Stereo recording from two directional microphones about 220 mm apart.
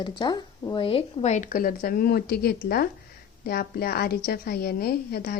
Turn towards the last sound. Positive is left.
turn(degrees=45)  # may be behind; listen again after turning